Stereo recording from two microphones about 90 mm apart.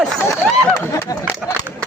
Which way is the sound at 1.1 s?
40° left (ahead or behind).